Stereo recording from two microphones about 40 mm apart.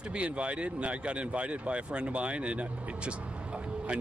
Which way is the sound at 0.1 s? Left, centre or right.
Right.